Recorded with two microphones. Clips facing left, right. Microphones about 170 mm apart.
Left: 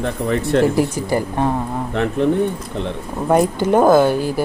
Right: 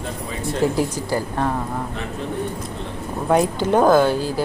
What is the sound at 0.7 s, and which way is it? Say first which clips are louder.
Speech: left 4 dB; 15° left (ahead or behind).